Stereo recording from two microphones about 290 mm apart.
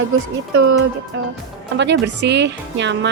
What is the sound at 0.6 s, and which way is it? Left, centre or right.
Speech, right.